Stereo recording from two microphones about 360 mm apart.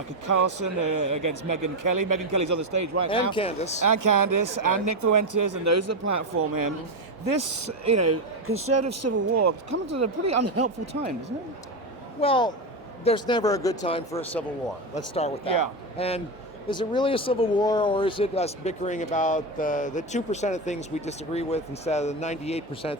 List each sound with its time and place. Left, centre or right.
0.3 s speech: right
3.3 s speech: centre
3.8 s speech: right
12.2 s speech: centre